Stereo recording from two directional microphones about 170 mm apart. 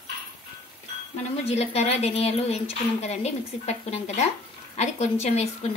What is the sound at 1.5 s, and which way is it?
Speech, 35° left (ahead or behind).